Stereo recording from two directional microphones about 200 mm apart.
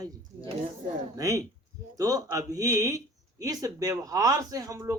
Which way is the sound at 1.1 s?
15° right (ahead or behind).